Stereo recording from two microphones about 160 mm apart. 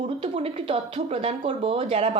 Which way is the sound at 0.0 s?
35° right (ahead or behind).